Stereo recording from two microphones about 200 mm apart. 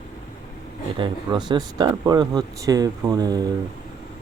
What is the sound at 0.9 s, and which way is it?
Speech, 25° right (ahead or behind).